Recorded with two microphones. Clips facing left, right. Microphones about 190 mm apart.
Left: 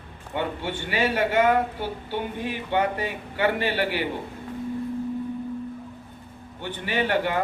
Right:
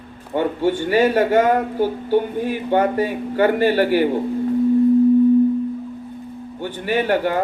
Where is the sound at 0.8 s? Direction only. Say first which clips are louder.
Right 7 dB; 45° right (ahead or behind).